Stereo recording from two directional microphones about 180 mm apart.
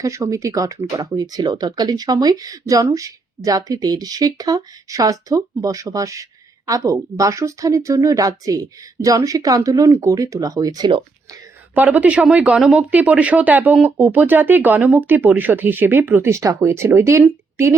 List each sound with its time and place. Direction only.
0.0 s speech: 15° right (ahead or behind)
11.7 s speech: 10° right (ahead or behind)